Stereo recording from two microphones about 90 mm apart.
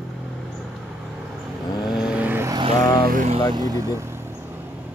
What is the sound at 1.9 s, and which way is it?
Vehicle, 10° right (ahead or behind).